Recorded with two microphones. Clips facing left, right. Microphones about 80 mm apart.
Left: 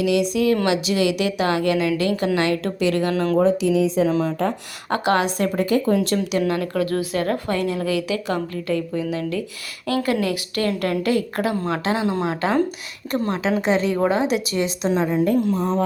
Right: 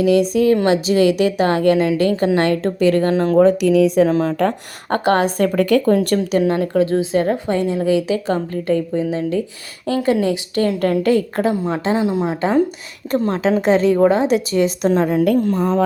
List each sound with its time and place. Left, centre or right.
0.0 s a woman's voice: right
3.4 s speech: right
4.1 s a woman's voice: right
5.5 s speech: right
6.5 s speech: right
11.5 s a woman's voice: centre
13.1 s speech: right
13.7 s a woman's voice: right
15.1 s speech: right